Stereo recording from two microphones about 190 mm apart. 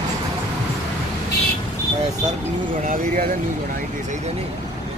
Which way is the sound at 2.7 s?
45° right (ahead or behind).